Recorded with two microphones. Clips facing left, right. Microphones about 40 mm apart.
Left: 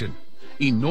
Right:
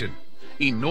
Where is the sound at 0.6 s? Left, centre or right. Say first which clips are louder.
Left 2 dB; right.